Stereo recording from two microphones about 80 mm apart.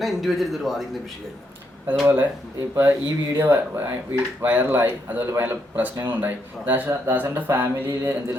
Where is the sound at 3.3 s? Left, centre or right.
Right.